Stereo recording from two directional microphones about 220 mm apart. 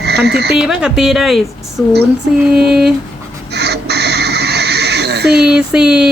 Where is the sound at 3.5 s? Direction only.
50° right (ahead or behind).